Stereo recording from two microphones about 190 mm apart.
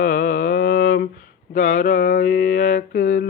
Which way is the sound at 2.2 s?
45° left (ahead or behind).